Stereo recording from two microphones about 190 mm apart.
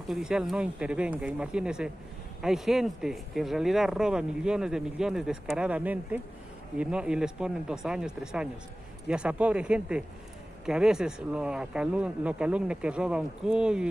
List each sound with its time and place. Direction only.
0.1 s speech: 5° right (ahead or behind)